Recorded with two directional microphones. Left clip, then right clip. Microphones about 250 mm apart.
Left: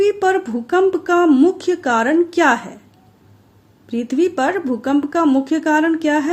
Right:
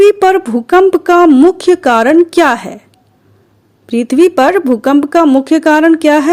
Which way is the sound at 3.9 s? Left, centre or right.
Right.